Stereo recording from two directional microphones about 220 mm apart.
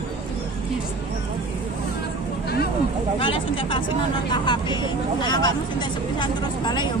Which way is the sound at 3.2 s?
25° left (ahead or behind).